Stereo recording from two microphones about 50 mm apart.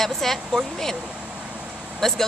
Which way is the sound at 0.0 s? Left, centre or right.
Centre.